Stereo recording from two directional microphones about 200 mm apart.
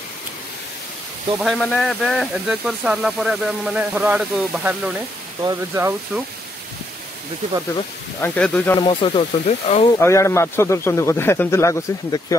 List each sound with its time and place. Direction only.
1.4 s speech: 5° left (ahead or behind)
5.4 s speech: 15° right (ahead or behind)
8.2 s speech: 10° left (ahead or behind)
8.7 s speech: 25° left (ahead or behind)
9.9 s speech: 15° left (ahead or behind)